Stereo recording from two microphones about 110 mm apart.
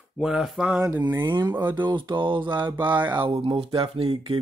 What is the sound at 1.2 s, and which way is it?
Speech, 40° right (ahead or behind).